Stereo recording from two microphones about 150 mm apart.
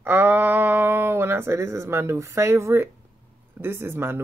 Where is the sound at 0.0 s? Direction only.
15° right (ahead or behind).